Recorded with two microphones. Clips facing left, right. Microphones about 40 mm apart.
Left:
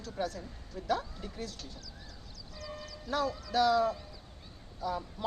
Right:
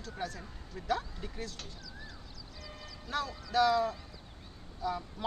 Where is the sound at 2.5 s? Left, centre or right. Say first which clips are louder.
Left 6 dB; centre.